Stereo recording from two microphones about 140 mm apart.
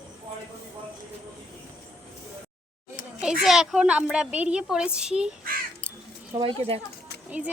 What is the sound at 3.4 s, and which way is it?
A woman's voice, centre (ahead or behind).